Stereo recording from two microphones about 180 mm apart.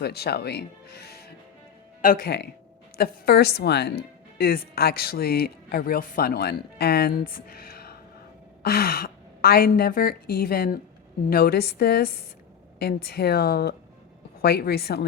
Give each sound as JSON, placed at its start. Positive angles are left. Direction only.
{"t": 0.0, "sound": "a woman's voice", "side_deg": 65}